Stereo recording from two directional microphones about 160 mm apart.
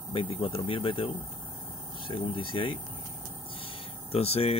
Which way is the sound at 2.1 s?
35° left (ahead or behind).